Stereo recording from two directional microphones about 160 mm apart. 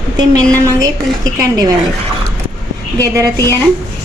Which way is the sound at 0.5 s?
20° right (ahead or behind).